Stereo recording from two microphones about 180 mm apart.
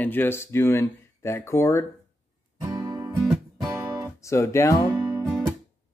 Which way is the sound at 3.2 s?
Centre (ahead or behind).